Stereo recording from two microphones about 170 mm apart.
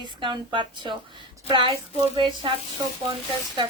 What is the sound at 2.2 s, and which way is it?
Speech, 30° right (ahead or behind).